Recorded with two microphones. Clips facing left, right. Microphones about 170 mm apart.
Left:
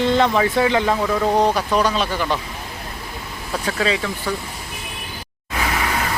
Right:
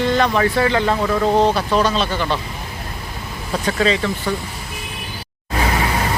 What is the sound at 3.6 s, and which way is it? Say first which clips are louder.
Speech: right 3 dB; 5° left (ahead or behind).